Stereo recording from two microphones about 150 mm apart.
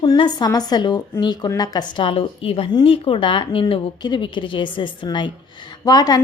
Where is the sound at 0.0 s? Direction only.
30° left (ahead or behind).